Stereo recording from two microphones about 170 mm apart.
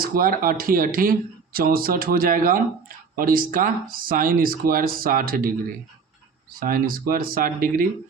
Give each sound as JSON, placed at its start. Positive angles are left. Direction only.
{"t": 0.0, "sound": "speech", "side_deg": -55}
{"t": 6.6, "sound": "speech", "side_deg": -60}